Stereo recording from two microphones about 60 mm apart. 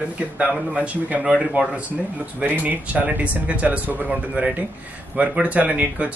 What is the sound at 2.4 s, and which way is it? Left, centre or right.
Speech, right.